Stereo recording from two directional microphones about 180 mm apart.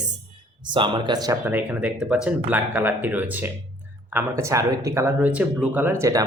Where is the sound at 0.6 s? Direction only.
25° right (ahead or behind).